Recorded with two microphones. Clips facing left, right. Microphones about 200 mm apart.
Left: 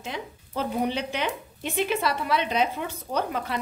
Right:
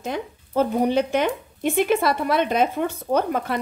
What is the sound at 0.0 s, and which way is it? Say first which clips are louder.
Speech: right 7 dB; 45° right (ahead or behind).